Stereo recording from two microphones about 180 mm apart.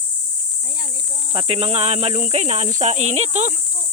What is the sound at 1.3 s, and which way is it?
Speech, 30° right (ahead or behind).